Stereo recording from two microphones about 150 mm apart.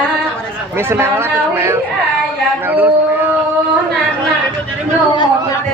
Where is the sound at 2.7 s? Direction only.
10° right (ahead or behind).